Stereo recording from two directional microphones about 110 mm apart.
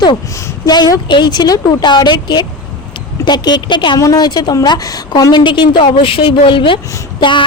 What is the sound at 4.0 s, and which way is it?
A woman's voice, 35° left (ahead or behind).